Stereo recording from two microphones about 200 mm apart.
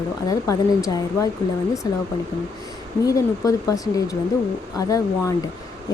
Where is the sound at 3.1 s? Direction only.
15° left (ahead or behind).